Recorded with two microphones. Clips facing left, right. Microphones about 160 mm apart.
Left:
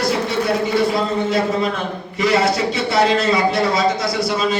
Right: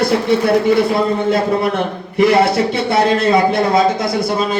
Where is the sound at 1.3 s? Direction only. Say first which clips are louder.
Right 3 dB; 65° right (ahead or behind).